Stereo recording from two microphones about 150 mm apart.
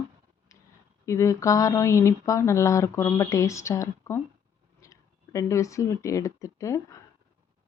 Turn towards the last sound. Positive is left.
turn(degrees=20)  # may be behind; listen again after turning